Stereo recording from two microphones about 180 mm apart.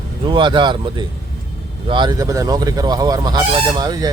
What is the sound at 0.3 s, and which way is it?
Speech, 25° right (ahead or behind).